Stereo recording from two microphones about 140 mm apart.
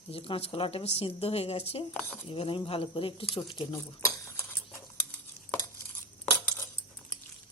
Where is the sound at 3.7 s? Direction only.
20° left (ahead or behind).